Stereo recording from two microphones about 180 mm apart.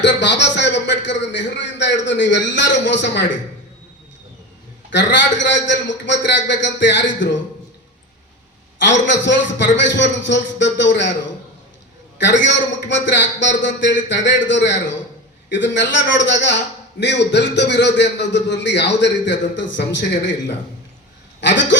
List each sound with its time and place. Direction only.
0.0 s a man's voice: 75° left (ahead or behind)
4.9 s a man's voice: 85° left
8.8 s a man's voice: 85° left
12.2 s a man's voice: 90° left
17.0 s a man's voice: 70° left (ahead or behind)
21.4 s a man's voice: 90° left